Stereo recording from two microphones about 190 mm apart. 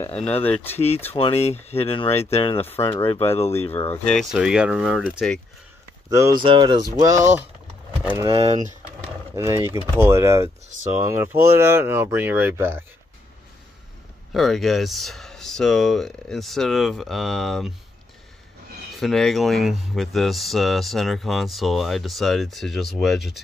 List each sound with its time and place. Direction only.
0.0 s speech: 5° left (ahead or behind)
0.7 s speech: 35° left (ahead or behind)
3.8 s speech: 10° left (ahead or behind)
6.0 s speech: 15° right (ahead or behind)
14.3 s speech: centre (ahead or behind)
18.9 s speech: centre (ahead or behind)